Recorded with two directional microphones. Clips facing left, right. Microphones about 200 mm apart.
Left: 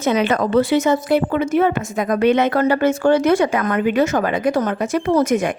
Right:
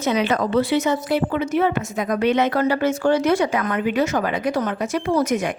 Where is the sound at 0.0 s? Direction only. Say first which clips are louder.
Left 3 dB; 50° left (ahead or behind).